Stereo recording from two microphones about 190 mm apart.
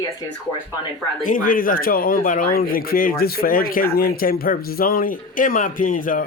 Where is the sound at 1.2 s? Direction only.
45° left (ahead or behind).